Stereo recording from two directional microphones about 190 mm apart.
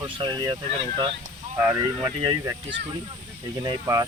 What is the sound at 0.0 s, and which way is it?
Speech, 20° right (ahead or behind).